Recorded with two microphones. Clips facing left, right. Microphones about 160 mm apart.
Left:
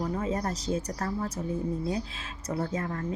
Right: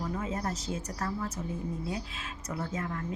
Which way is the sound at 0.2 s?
35° left (ahead or behind).